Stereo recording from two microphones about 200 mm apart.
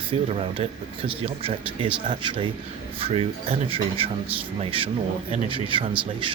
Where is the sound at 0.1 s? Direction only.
25° right (ahead or behind).